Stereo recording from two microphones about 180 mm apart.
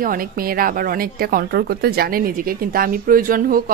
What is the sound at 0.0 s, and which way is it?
A woman's voice, 50° right (ahead or behind).